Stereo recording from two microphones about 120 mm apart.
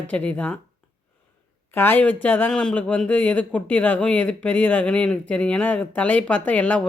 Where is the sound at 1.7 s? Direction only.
15° left (ahead or behind).